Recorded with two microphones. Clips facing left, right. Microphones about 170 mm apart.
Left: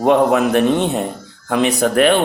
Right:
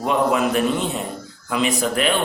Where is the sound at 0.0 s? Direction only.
65° left (ahead or behind).